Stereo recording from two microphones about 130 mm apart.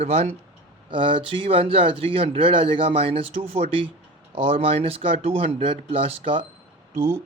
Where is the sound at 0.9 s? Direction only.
40° right (ahead or behind).